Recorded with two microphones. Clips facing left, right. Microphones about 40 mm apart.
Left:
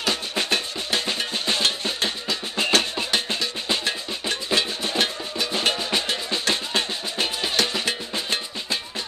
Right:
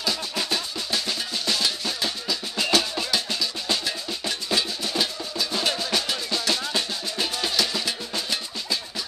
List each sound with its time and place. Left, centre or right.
0.0 s drum: left
4.6 s music: left
7.5 s percussion: left